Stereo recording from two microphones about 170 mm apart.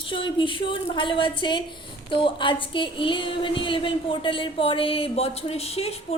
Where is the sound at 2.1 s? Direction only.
30° left (ahead or behind).